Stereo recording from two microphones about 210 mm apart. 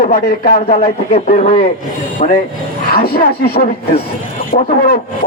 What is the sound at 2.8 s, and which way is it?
Speech, 45° left (ahead or behind).